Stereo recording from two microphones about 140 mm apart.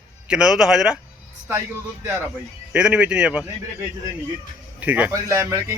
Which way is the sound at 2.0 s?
20° right (ahead or behind).